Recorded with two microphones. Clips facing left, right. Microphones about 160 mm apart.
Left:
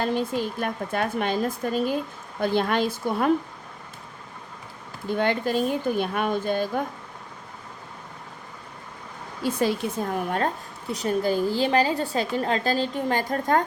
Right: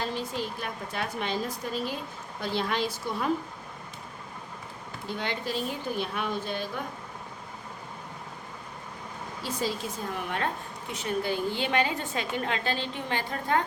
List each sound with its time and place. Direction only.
0.0 s a woman's voice: 55° left (ahead or behind)
5.1 s speech: 50° left (ahead or behind)
9.4 s a woman's voice: 55° left (ahead or behind)
10.2 s a woman's voice: 40° left (ahead or behind)